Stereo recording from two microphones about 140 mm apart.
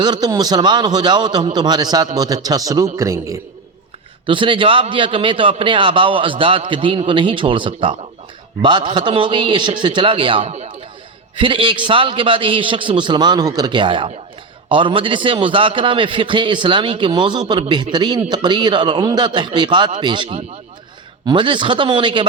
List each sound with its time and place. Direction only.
0.0 s a man's voice: 30° right (ahead or behind)
4.3 s a man's voice: 35° right (ahead or behind)
10.4 s speech: 50° right (ahead or behind)
11.3 s a man's voice: 35° right (ahead or behind)